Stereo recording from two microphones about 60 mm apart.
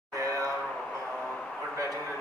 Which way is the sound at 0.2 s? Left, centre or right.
Right.